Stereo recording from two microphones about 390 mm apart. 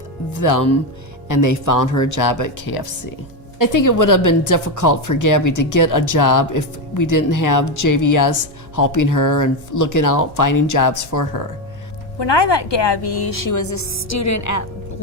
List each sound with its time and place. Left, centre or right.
0.3 s speech: left
12.2 s a woman's voice: left